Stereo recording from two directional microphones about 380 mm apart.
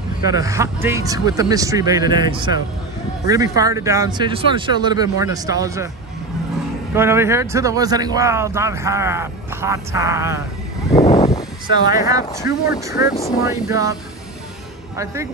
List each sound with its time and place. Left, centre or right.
0.3 s speech: centre
7.0 s speech: centre
10.9 s a sound: centre
11.8 s speech: centre